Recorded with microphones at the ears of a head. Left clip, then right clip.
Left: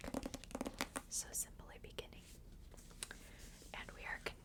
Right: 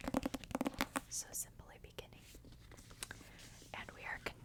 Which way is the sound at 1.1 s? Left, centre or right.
Centre.